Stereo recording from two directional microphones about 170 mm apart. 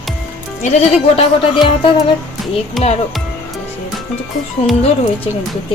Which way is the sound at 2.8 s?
Centre (ahead or behind).